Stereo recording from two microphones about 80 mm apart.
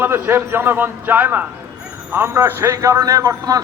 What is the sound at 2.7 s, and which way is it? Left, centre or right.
Speech, right.